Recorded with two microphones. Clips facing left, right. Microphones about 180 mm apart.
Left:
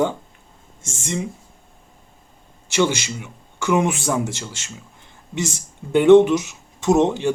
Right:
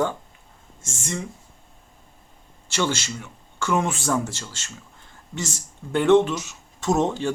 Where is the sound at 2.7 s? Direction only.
15° left (ahead or behind).